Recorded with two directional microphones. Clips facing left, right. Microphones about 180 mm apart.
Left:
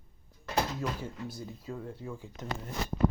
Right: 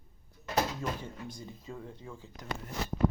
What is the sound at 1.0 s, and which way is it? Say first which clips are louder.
Speech: left 3 dB; 5° left (ahead or behind).